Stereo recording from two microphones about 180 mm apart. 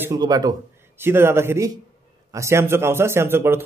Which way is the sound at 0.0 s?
20° right (ahead or behind).